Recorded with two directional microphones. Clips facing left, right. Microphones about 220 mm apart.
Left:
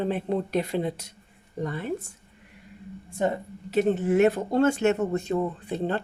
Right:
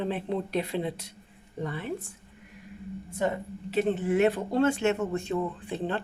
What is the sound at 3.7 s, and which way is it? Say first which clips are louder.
A woman's voice: left 3 dB; 40° left (ahead or behind).